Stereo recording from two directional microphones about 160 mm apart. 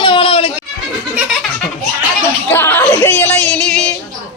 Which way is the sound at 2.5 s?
15° left (ahead or behind).